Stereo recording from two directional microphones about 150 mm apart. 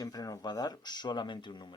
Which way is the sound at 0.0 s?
25° left (ahead or behind).